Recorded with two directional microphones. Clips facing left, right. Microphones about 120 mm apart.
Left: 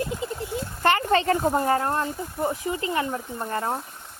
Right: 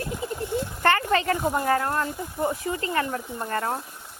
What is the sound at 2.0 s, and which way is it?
Speech, 15° right (ahead or behind).